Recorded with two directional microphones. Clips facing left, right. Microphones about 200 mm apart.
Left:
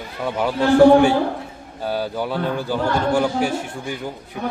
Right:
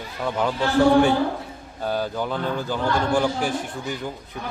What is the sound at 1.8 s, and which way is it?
A man's voice, 5° left (ahead or behind).